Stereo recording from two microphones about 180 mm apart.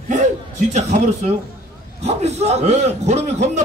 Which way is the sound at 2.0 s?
35° right (ahead or behind).